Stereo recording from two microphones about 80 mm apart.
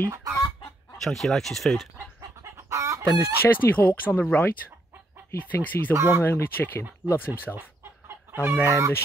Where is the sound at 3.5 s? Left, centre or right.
Left.